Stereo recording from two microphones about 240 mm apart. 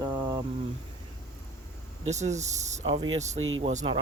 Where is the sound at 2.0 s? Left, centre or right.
Right.